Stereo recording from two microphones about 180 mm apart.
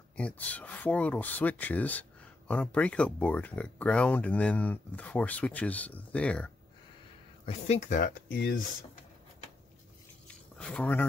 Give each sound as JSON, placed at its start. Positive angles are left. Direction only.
{"t": 0.2, "sound": "speech", "side_deg": 10}
{"t": 7.4, "sound": "speech", "side_deg": 40}
{"t": 8.0, "sound": "speech", "side_deg": 65}
{"t": 10.2, "sound": "a sound", "side_deg": 5}